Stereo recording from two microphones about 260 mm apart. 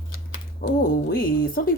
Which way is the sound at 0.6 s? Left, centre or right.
Left.